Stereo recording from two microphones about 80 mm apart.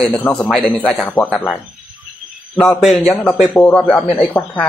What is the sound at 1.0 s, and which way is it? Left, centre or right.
Speech, centre.